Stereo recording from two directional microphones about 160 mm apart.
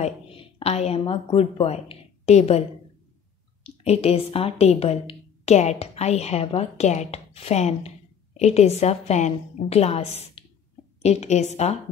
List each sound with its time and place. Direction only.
0.0 s a woman's voice: 40° left (ahead or behind)
3.8 s a woman's voice: 40° left (ahead or behind)